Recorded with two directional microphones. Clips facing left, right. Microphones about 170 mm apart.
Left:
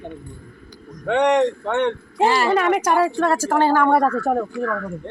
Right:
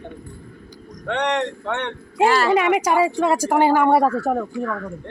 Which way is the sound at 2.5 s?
10° right (ahead or behind).